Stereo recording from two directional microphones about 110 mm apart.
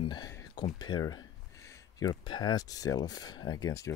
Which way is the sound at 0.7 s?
40° left (ahead or behind).